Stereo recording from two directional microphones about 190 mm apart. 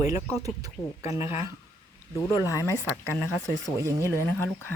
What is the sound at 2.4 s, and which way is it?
Speech, 15° left (ahead or behind).